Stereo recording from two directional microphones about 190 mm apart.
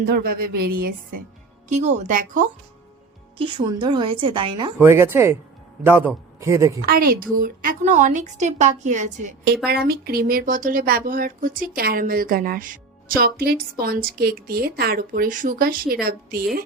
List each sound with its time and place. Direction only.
0.0 s speech: 50° right (ahead or behind)
1.7 s a woman's voice: 40° right (ahead or behind)
3.3 s a woman's voice: 25° right (ahead or behind)
4.8 s a man's voice: 15° right (ahead or behind)
6.8 s a woman's voice: 50° right (ahead or behind)
9.6 s speech: 55° right (ahead or behind)